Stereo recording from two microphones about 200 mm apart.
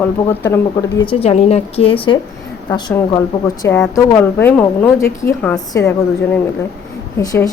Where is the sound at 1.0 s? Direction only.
30° left (ahead or behind); by 5.5 s 10° left (ahead or behind).